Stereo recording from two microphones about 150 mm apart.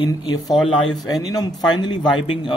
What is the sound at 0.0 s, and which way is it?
A man's voice, 30° left (ahead or behind).